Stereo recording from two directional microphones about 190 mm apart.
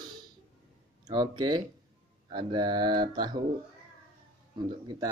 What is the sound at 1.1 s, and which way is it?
Speech, 20° right (ahead or behind).